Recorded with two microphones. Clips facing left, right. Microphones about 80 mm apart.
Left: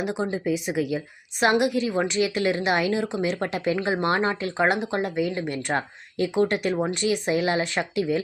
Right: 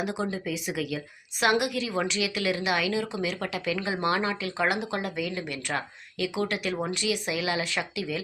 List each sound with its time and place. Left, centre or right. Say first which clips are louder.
0.0 s a woman's voice: left 4 dB; left